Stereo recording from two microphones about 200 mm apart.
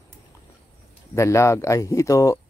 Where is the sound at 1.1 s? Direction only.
15° left (ahead or behind).